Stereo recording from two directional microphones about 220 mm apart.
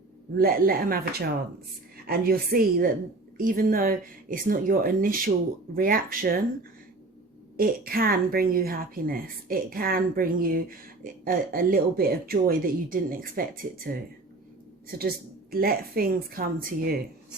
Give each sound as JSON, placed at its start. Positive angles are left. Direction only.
{"t": 0.3, "sound": "a woman's voice", "side_deg": -40}